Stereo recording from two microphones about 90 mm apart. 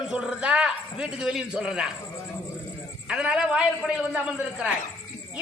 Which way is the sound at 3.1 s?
10° right (ahead or behind).